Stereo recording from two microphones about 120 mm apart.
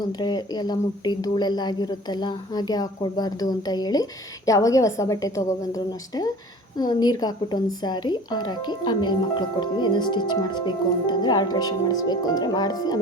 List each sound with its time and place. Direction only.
0.1 s a woman's voice: 35° left (ahead or behind)